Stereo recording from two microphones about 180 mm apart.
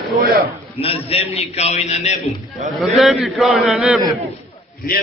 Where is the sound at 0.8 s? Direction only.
30° left (ahead or behind).